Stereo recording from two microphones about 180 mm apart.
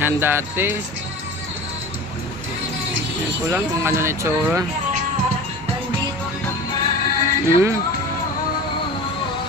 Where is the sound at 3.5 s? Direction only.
15° right (ahead or behind).